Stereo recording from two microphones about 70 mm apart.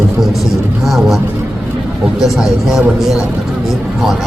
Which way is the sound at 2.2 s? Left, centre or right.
Centre.